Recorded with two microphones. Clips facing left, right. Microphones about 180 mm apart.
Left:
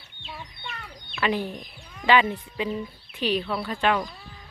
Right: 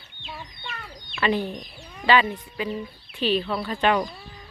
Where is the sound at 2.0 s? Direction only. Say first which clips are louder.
Even; 20° left (ahead or behind).